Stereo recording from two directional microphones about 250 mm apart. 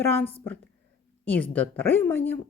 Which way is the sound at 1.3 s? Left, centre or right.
Centre.